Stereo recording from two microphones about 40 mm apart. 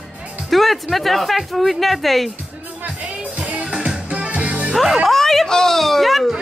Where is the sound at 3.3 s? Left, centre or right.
Right.